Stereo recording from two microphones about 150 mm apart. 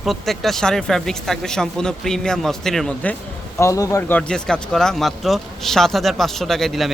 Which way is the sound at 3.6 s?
20° left (ahead or behind).